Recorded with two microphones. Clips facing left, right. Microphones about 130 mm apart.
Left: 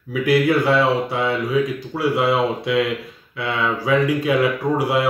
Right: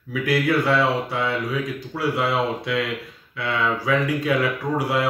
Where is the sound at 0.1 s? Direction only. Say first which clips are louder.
Left 4 dB; 20° left (ahead or behind).